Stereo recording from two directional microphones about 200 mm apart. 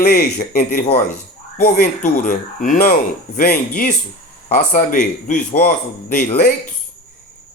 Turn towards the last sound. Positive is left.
turn(degrees=45)  # may be behind; listen again after turning